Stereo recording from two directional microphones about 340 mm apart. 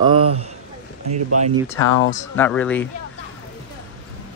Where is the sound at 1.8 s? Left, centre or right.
Left.